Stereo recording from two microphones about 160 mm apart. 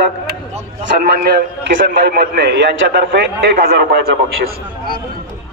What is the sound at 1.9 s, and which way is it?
A man's voice, 85° right.